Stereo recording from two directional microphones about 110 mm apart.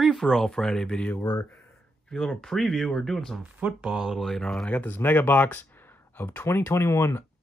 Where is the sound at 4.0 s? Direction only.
Centre (ahead or behind).